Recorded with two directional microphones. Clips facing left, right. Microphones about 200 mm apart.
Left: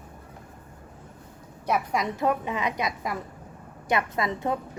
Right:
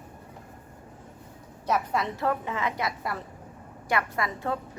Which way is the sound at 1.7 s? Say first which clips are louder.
Left 1 dB; 15° left (ahead or behind).